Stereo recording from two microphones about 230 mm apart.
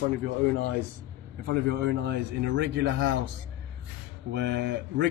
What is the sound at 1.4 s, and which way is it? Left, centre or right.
A man's voice, right.